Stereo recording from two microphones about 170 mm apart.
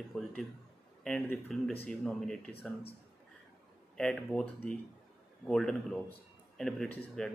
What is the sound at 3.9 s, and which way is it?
A man's voice, 5° left (ahead or behind).